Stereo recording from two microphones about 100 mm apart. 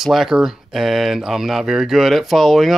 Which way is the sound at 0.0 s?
5° right (ahead or behind).